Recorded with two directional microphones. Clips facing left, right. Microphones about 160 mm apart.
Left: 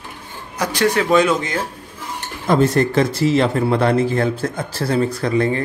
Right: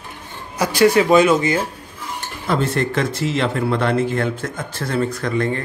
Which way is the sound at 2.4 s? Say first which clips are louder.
Left 5 dB; 40° left (ahead or behind).